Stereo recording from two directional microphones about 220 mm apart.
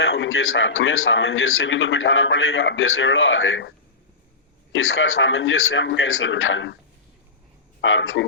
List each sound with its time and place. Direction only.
0.0 s a man's voice: 65° left (ahead or behind)
4.7 s a man's voice: 65° left (ahead or behind)
7.8 s speech: 60° left (ahead or behind)